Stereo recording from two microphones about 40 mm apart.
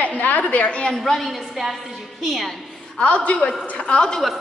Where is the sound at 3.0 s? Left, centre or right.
Left.